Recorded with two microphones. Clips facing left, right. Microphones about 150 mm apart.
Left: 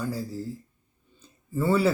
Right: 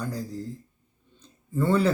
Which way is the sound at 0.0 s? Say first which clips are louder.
Left 1 dB; 5° left (ahead or behind).